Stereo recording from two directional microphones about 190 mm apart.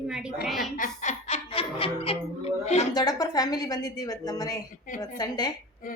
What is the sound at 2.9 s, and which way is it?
A woman's voice, 20° left (ahead or behind).